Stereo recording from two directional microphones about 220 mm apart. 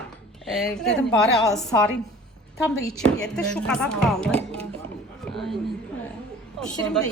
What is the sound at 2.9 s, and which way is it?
A woman's voice, 5° left (ahead or behind).